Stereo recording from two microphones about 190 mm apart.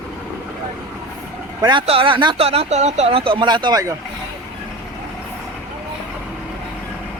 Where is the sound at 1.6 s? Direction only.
25° right (ahead or behind).